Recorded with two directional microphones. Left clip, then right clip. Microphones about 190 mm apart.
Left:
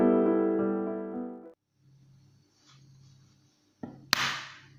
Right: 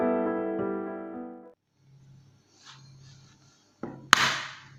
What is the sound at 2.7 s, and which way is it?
Music, 50° right (ahead or behind).